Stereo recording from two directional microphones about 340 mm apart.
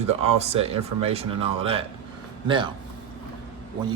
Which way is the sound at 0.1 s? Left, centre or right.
Centre.